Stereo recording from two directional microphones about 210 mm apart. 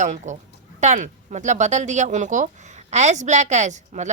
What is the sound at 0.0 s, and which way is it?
Speech, 35° right (ahead or behind).